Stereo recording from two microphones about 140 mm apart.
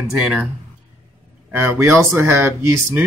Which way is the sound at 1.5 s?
10° right (ahead or behind).